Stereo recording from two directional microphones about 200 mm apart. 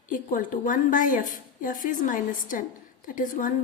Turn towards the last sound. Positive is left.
turn(degrees=40)  # may be behind; listen again after turning